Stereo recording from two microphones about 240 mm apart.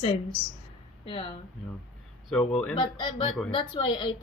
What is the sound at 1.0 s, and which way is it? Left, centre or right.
Speech, left.